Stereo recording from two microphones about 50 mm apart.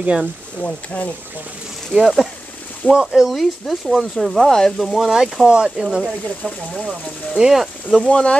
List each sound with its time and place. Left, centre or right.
0.0 s speech: right
0.6 s speech: left
2.9 s speech: centre
3.3 s speech: centre
4.7 s speech: centre
8.0 s speech: centre